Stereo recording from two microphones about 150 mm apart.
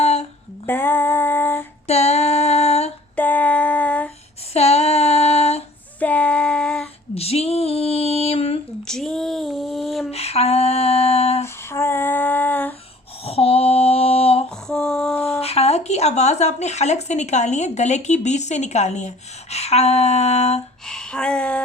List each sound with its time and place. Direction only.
0.0 s a sound: 45° left (ahead or behind)
0.6 s female singing: 15° left (ahead or behind)
1.9 s female singing: 45° left (ahead or behind)
3.2 s female singing: 10° left (ahead or behind)
4.5 s female singing: 45° left (ahead or behind)
6.0 s child singing: 10° left (ahead or behind)
7.2 s female singing: 45° left (ahead or behind)
8.8 s a sound: 5° left (ahead or behind)
10.1 s a sound: 45° left (ahead or behind)
11.4 s female singing: 15° left (ahead or behind)
13.2 s female singing: 40° left (ahead or behind)
14.5 s female singing: 5° left (ahead or behind)
15.4 s speech: 45° left (ahead or behind)
20.8 s a sound: 5° left (ahead or behind)